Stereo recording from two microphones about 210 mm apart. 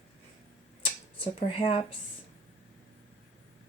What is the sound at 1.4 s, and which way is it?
Speech, 25° left (ahead or behind).